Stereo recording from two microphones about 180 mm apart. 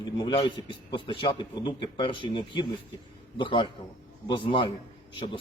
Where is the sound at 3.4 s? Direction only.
25° left (ahead or behind).